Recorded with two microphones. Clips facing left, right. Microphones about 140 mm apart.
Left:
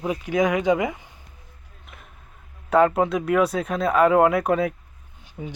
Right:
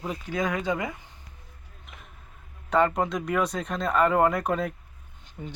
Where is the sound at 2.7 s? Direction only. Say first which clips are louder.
Left 5 dB; 5° left (ahead or behind).